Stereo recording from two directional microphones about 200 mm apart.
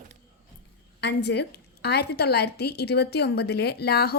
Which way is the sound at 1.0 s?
55° left (ahead or behind).